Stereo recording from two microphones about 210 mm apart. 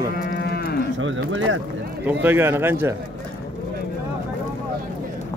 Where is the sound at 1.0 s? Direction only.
65° right (ahead or behind).